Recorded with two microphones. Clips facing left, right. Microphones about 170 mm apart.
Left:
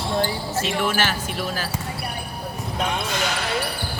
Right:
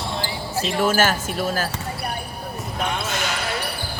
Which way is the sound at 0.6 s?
40° right (ahead or behind).